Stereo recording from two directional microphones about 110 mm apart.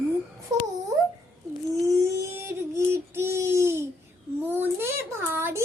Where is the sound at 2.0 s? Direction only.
25° right (ahead or behind).